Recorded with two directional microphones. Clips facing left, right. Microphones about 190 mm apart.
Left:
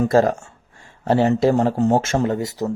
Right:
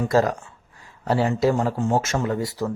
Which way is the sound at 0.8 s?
25° left (ahead or behind).